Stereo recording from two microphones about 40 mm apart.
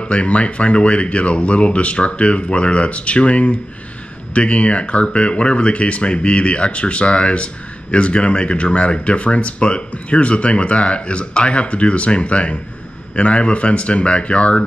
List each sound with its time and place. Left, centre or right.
0.0 s speech: left